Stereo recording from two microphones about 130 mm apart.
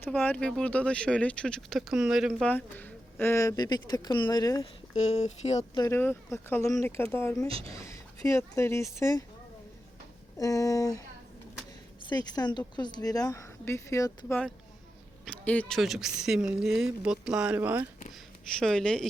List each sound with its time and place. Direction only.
0.0 s speech: 15° left (ahead or behind); by 2.3 s 5° right (ahead or behind)
2.4 s speech: 15° left (ahead or behind)
4.6 s speech: 55° left (ahead or behind)
5.9 s speech: 15° left (ahead or behind)
7.4 s speech: 45° right (ahead or behind)
7.7 s speech: 25° left (ahead or behind)
10.3 s speech: 25° left (ahead or behind)
12.0 s speech: 30° left (ahead or behind)
14.3 s speech: 10° left (ahead or behind); by 17.8 s 10° right (ahead or behind)
18.6 s speech: 5° left (ahead or behind)